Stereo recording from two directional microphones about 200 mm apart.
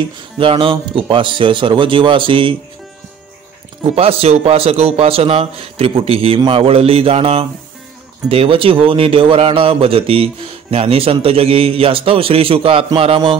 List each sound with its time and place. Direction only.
0.4 s speech: 25° right (ahead or behind)
3.9 s speech: 30° right (ahead or behind)